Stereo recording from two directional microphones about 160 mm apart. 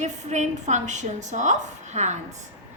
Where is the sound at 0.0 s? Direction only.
45° right (ahead or behind).